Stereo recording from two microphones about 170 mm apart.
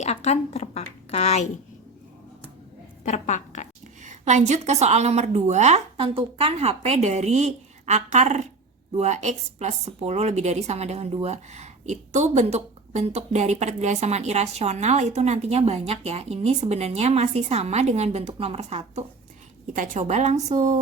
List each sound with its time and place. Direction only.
0.0 s a woman's voice: 40° left (ahead or behind)
3.0 s a woman's voice: 45° left (ahead or behind)
4.0 s a woman's voice: 45° right (ahead or behind)